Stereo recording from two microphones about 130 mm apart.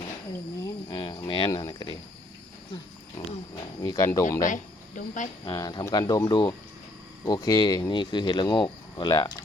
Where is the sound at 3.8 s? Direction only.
25° left (ahead or behind).